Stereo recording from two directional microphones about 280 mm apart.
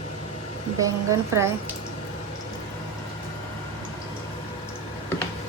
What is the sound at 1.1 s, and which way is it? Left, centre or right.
Speech, centre.